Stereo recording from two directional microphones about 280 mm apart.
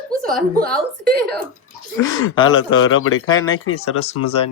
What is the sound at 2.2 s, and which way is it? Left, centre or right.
Speech, left.